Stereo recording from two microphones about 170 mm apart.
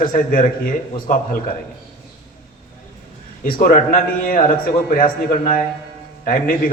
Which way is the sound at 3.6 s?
55° left (ahead or behind).